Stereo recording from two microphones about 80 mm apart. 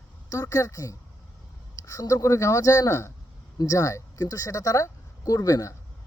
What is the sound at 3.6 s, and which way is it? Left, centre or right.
Speech, left.